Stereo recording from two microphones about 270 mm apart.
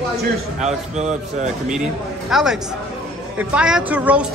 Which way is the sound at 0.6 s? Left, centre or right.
Right.